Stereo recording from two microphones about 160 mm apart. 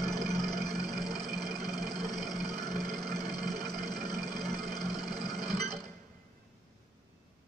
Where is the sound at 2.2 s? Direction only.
Centre (ahead or behind).